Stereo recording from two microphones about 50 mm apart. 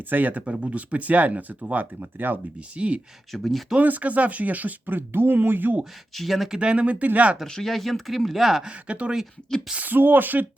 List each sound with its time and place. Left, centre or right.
0.0 s speech: right
2.6 s speech: right
3.3 s speech: centre
3.8 s speech: right
6.1 s speech: centre
6.6 s speech: right
7.4 s speech: centre
8.6 s speech: right
9.7 s speech: right